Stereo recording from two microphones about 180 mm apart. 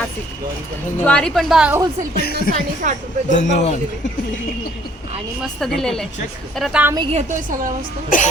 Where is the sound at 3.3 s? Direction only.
40° left (ahead or behind).